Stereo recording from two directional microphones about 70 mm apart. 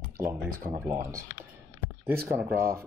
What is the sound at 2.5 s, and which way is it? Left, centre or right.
Speech, centre.